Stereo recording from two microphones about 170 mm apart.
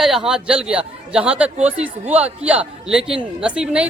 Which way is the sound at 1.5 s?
40° right (ahead or behind).